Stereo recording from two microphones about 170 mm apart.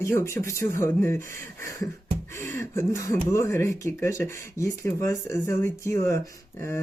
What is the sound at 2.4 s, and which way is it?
Speech, 15° left (ahead or behind).